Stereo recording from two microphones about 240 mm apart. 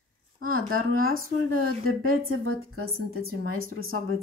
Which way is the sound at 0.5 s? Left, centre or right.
Right.